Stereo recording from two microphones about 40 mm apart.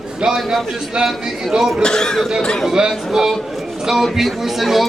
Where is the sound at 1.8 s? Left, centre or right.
Centre.